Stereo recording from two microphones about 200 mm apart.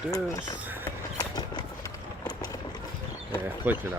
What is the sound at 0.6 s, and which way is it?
Speech, 10° right (ahead or behind).